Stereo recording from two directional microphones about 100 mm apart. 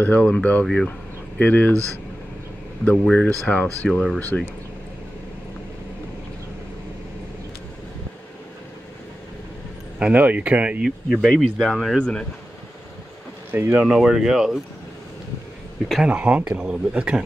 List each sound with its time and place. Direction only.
0.0 s speech: 15° left (ahead or behind)
2.8 s speech: 10° left (ahead or behind)
9.9 s speech: 10° right (ahead or behind)
11.1 s speech: 5° left (ahead or behind)
13.5 s speech: 20° right (ahead or behind)
13.8 s speech: 5° right (ahead or behind)
16.1 s speech: 15° right (ahead or behind)